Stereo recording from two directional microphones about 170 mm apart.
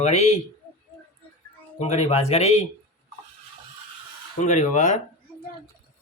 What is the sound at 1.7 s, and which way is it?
Speech, 40° left (ahead or behind).